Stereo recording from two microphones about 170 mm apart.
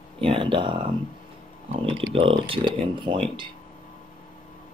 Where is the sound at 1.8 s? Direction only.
30° right (ahead or behind).